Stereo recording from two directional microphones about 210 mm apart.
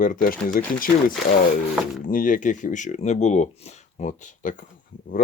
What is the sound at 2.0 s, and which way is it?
Speech, 40° left (ahead or behind).